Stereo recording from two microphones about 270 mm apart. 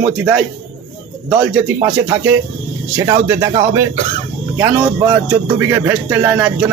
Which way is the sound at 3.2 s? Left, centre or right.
Centre.